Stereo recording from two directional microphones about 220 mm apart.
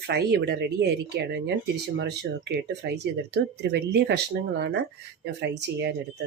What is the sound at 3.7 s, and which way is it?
Speech, 50° right (ahead or behind).